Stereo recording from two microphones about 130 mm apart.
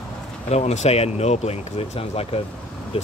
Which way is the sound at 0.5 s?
60° left (ahead or behind).